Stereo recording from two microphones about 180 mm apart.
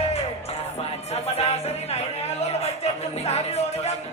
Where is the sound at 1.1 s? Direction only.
35° left (ahead or behind).